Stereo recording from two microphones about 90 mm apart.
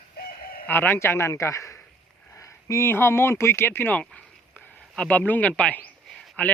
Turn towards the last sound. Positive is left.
turn(degrees=15)  # may be behind; listen again after turning